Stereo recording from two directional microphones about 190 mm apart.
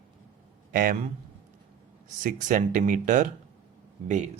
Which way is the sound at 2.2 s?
40° right (ahead or behind).